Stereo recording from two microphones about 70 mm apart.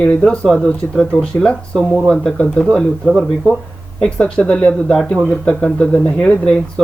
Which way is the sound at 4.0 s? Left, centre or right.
Centre.